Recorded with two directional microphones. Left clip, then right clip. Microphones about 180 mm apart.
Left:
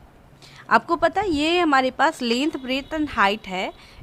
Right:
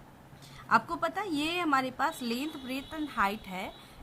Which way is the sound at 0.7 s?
45° left (ahead or behind).